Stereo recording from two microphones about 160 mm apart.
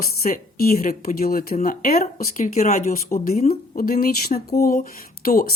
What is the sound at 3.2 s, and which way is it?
Speech, 65° left (ahead or behind).